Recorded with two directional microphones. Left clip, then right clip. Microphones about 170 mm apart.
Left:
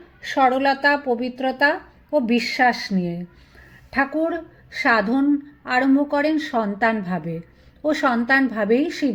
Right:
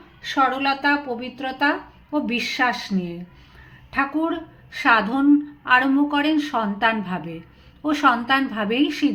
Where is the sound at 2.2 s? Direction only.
50° left (ahead or behind).